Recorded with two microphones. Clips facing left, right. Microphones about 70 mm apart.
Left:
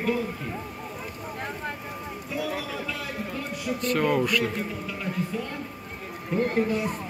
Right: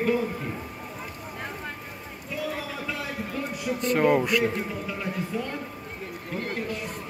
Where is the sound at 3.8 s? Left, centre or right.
Right.